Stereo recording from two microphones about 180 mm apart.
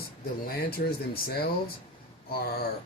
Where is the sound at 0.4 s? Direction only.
55° left (ahead or behind).